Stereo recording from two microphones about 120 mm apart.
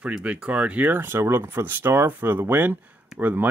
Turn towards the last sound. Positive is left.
turn(degrees=-15)  # may be behind; listen again after turning